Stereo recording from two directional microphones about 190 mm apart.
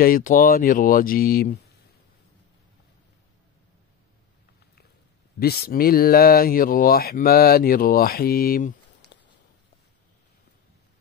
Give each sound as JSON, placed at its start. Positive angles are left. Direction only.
{"t": 0.0, "sound": "speech", "side_deg": 45}
{"t": 5.4, "sound": "speech", "side_deg": 55}